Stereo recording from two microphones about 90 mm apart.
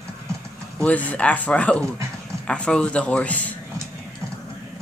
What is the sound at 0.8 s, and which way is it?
Speech, 15° left (ahead or behind).